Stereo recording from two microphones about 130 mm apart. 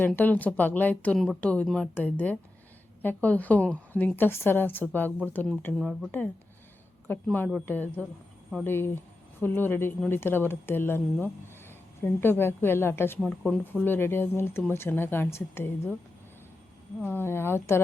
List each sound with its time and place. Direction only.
0.2 s a woman's voice: 10° left (ahead or behind)
5.8 s speech: centre (ahead or behind)
6.1 s a woman's voice: 15° left (ahead or behind)
7.3 s a woman's voice: 10° left (ahead or behind)
17.0 s speech: 15° left (ahead or behind)